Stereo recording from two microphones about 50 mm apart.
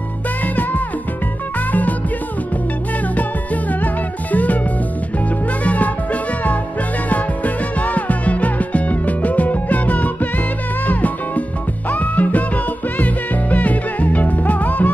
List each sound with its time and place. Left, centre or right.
1.7 s music: left
3.8 s music: left
5.6 s music: left
7.1 s music: left